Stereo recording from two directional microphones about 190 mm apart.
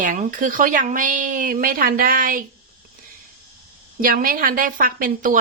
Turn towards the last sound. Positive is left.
turn(degrees=-45)  # may be behind; listen again after turning